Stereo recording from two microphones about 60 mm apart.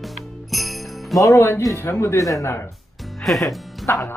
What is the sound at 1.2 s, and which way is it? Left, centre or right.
Speech, left.